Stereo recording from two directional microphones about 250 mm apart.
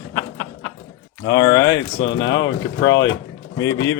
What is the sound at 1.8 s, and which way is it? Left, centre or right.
Speech, left.